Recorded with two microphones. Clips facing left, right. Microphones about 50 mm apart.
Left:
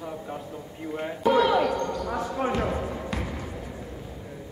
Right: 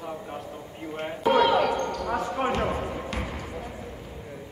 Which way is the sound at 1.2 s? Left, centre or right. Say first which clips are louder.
Even; right.